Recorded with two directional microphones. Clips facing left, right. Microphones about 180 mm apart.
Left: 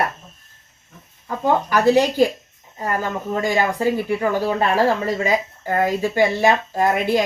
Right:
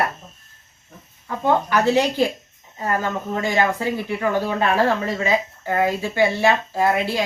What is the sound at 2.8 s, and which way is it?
Speech, 10° left (ahead or behind).